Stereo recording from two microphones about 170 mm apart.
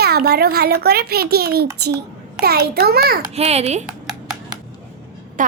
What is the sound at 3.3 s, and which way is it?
Speech, 40° right (ahead or behind).